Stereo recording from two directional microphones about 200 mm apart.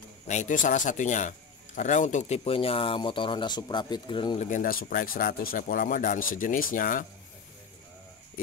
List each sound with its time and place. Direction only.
0.3 s speech: 40° left (ahead or behind)
4.5 s speech: 45° left (ahead or behind)